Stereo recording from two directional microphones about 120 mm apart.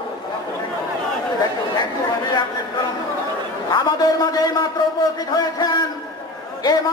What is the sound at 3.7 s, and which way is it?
Speech, 35° left (ahead or behind).